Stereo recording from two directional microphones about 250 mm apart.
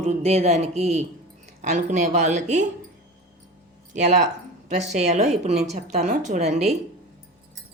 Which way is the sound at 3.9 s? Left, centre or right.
Right.